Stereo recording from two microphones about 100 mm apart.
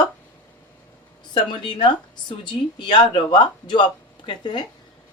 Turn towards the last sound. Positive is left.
turn(degrees=50)  # may be behind; listen again after turning